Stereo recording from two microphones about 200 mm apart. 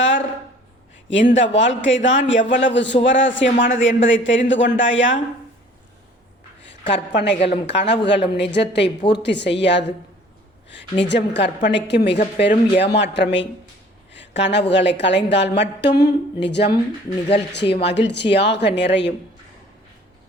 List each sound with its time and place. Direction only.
1.1 s speech: 65° left (ahead or behind)
6.9 s a woman's voice: 60° left (ahead or behind)
11.0 s a woman's voice: 60° left (ahead or behind)
14.1 s a sound: 65° left (ahead or behind)
14.7 s a woman's voice: 60° left (ahead or behind)